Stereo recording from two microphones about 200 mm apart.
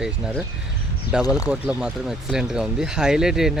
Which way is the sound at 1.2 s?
15° left (ahead or behind).